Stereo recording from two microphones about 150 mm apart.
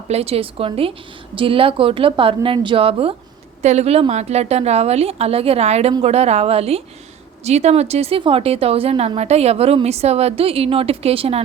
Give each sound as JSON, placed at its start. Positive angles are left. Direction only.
{"t": 0.1, "sound": "a woman's voice", "side_deg": -40}